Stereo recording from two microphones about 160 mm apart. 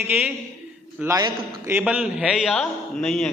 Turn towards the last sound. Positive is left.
turn(degrees=0)  # may be behind; listen again after turning